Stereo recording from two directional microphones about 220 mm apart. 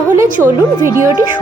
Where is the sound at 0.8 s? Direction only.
10° right (ahead or behind).